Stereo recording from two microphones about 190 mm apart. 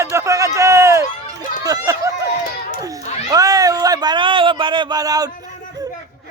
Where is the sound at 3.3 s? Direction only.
20° right (ahead or behind).